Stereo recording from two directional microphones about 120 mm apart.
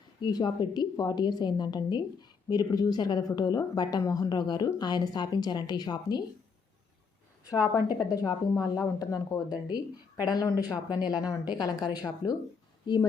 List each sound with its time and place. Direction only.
0.2 s a woman's voice: 35° left (ahead or behind)
7.4 s a woman's voice: 30° left (ahead or behind)